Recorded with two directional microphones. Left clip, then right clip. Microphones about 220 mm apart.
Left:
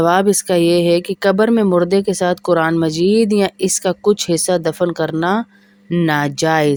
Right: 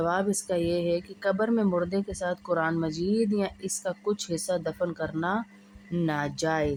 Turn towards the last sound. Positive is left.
turn(degrees=45)  # may be behind; listen again after turning